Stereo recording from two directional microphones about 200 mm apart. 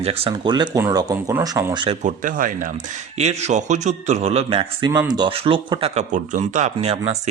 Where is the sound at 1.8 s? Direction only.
35° right (ahead or behind).